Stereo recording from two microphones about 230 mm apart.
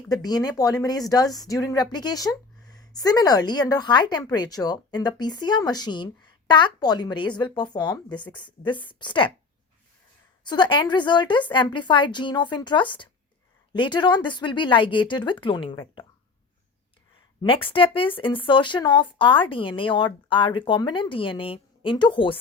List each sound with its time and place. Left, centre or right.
0.1 s speech: centre
10.4 s speech: centre
17.4 s speech: left